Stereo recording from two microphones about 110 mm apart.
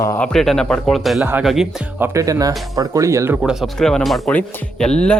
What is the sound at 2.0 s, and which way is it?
Speech, 30° right (ahead or behind).